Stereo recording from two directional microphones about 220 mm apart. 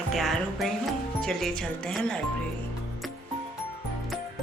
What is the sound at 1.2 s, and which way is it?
Speech, centre (ahead or behind).